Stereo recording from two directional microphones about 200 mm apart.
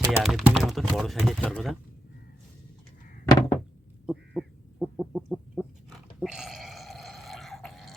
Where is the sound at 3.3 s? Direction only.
15° left (ahead or behind).